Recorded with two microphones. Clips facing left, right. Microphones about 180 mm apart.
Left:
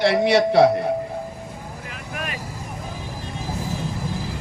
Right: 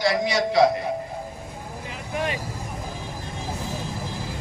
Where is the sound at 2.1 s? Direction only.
25° right (ahead or behind).